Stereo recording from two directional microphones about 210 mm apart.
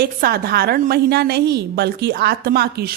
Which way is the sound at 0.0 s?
45° right (ahead or behind).